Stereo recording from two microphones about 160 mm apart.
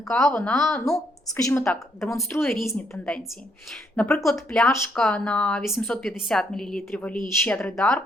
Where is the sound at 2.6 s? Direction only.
15° left (ahead or behind).